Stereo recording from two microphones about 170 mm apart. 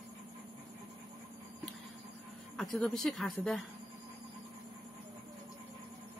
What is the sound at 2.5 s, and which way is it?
Speech, centre (ahead or behind).